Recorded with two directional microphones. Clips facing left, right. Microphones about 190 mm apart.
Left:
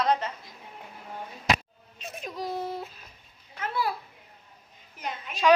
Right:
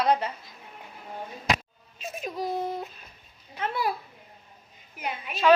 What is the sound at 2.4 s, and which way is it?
A child's voice, 20° right (ahead or behind).